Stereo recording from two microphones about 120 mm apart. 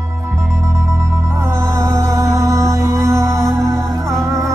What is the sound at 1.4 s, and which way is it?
Music, 25° right (ahead or behind).